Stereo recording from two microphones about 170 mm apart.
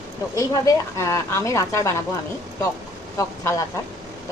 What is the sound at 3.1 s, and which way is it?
Speech, 20° left (ahead or behind).